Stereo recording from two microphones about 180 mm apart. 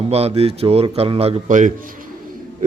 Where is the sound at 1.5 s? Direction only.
45° right (ahead or behind).